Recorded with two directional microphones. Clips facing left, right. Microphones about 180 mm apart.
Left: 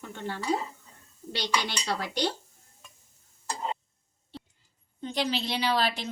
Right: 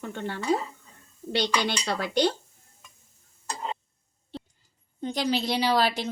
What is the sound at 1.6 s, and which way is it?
Speech, 60° right (ahead or behind).